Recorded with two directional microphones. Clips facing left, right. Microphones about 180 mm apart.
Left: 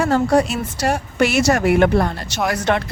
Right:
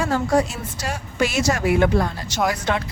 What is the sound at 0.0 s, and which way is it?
A woman's voice, 60° left (ahead or behind).